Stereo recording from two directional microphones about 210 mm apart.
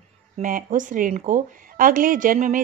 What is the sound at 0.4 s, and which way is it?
A woman's voice, 40° right (ahead or behind).